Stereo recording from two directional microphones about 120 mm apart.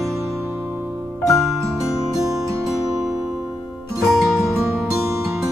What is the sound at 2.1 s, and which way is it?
Music, 30° right (ahead or behind).